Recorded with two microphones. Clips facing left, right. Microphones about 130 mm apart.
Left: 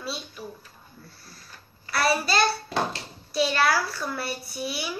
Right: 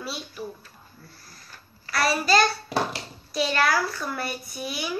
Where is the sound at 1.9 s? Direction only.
5° left (ahead or behind).